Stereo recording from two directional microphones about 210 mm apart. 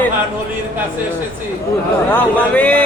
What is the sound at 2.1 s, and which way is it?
Speech, 5° left (ahead or behind).